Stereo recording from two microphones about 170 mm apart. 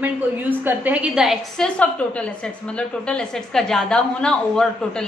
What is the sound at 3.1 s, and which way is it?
A woman's voice, 5° left (ahead or behind).